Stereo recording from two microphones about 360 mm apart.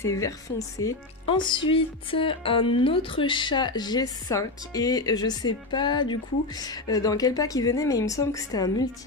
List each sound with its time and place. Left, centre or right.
0.0 s speech: centre